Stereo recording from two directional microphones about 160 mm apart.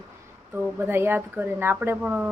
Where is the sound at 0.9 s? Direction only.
15° right (ahead or behind).